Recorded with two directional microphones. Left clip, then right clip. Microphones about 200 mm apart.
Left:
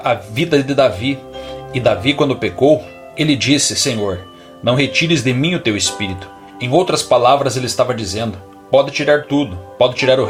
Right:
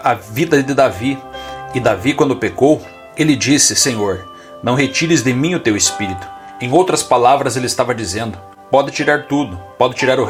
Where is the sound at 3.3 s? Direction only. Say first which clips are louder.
Right 1 dB; 20° right (ahead or behind).